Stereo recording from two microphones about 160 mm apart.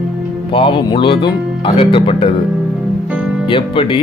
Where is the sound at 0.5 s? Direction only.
30° left (ahead or behind).